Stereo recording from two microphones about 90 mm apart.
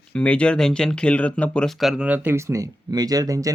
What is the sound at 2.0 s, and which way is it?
Speech, 20° right (ahead or behind).